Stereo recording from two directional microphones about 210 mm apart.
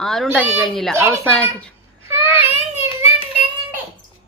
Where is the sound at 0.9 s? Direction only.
10° right (ahead or behind).